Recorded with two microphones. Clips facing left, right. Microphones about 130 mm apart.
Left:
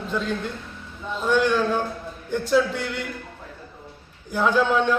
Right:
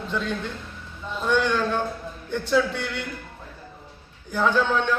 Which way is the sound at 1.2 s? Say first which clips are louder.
Left 2 dB; 10° left (ahead or behind).